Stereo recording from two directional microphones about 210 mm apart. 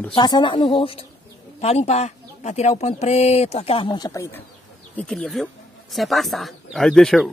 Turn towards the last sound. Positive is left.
turn(degrees=0)  # may be behind; listen again after turning